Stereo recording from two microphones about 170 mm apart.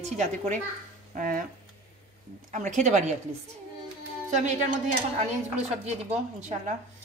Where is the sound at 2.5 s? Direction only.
45° right (ahead or behind).